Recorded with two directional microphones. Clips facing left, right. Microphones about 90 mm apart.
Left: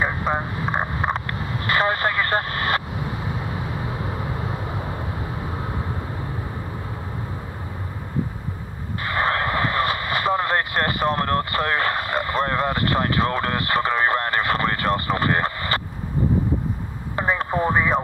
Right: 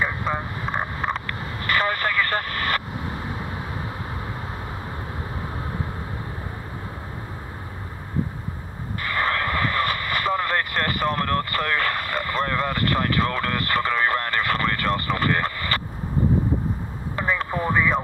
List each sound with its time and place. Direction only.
0.3 s speech: 40° left (ahead or behind)
0.7 s vehicle: 35° left (ahead or behind)
9.0 s vehicle: 30° left (ahead or behind)
17.1 s radio: 30° left (ahead or behind)